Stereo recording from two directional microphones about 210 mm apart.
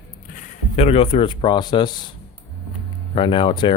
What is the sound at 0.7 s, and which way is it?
Speech, 30° left (ahead or behind).